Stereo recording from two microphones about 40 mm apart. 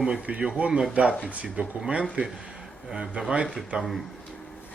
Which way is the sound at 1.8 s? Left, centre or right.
Right.